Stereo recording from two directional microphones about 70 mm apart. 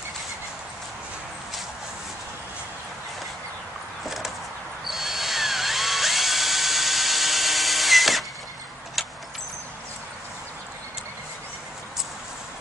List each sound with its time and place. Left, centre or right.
4.0 s a sound: centre
4.8 s drill: centre
9.0 s vehicle: centre